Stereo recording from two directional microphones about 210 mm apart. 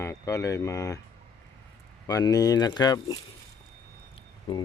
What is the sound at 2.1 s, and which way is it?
Speech, 15° left (ahead or behind).